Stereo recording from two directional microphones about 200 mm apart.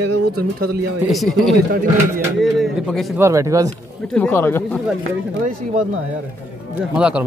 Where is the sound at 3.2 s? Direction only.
15° right (ahead or behind).